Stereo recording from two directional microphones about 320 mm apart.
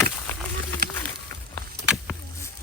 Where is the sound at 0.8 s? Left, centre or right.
Right.